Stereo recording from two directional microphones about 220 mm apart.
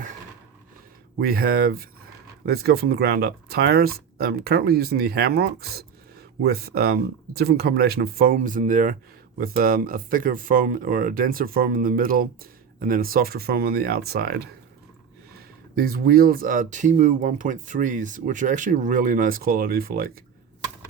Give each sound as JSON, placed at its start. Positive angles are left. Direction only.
{"t": 1.2, "sound": "speech", "side_deg": -45}
{"t": 15.8, "sound": "speech", "side_deg": -40}